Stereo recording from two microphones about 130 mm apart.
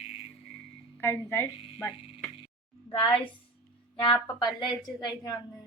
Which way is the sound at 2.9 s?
45° left (ahead or behind).